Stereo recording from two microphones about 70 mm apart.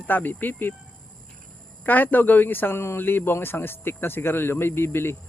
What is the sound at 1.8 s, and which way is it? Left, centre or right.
Speech, left.